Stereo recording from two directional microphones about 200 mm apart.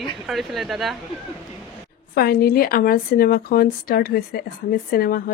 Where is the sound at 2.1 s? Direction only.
50° left (ahead or behind).